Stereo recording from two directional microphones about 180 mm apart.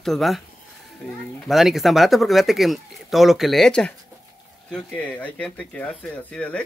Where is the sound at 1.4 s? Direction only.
Centre (ahead or behind).